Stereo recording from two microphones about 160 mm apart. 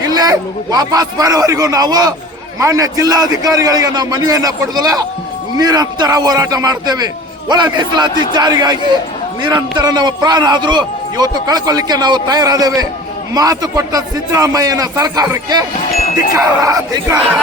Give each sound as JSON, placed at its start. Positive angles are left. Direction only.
{"t": 0.0, "sound": "a man's voice", "side_deg": -25}